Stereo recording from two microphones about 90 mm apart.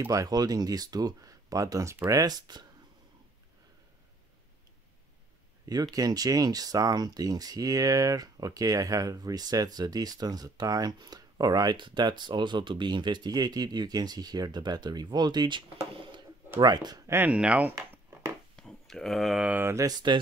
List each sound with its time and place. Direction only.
0.1 s speech: 45° right (ahead or behind)
5.7 s speech: 45° right (ahead or behind)
16.6 s speech: 50° right (ahead or behind)
17.0 s speech: 25° right (ahead or behind)
17.3 s speech: 15° right (ahead or behind)
18.6 s a sound: 5° left (ahead or behind)
19.4 s mantra: 20° right (ahead or behind)
19.9 s speech: 55° right (ahead or behind)